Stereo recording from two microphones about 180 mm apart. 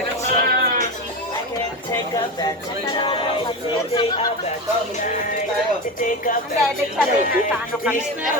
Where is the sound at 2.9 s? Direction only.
30° left (ahead or behind).